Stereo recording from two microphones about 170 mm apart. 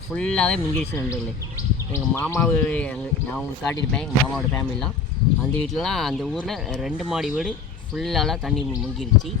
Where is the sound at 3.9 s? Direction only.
5° left (ahead or behind).